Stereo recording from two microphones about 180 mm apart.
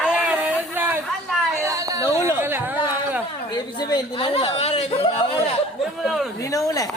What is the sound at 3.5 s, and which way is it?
A woman's voice, 25° left (ahead or behind).